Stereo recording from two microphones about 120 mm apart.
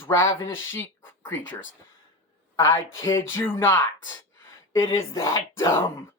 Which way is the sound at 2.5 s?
25° left (ahead or behind).